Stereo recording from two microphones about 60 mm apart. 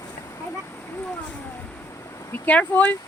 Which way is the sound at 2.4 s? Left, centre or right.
Left.